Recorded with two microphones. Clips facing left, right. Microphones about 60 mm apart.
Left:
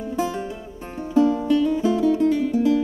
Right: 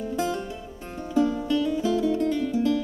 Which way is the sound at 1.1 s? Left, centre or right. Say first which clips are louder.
Left 5 dB; left.